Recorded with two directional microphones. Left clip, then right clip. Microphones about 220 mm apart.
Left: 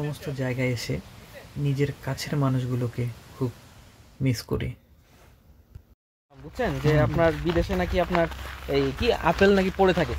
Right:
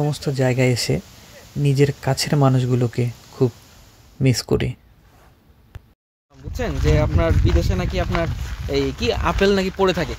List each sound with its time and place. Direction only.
0.1 s speech: 40° right (ahead or behind)
6.5 s speech: 55° right (ahead or behind)